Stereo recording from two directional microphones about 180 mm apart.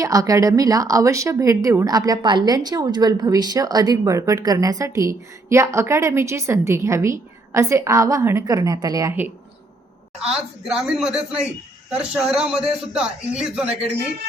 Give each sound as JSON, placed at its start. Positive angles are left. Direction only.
{"t": 0.0, "sound": "speech", "side_deg": -20}
{"t": 10.2, "sound": "a man's voice", "side_deg": -5}